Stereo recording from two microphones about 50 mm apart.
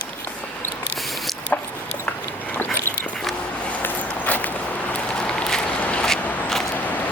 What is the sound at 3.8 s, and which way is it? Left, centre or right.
Vehicle, left.